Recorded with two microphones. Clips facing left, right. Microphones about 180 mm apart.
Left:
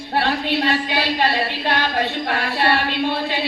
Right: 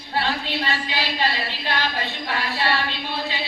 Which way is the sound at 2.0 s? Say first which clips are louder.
Left 6 dB; 50° left (ahead or behind).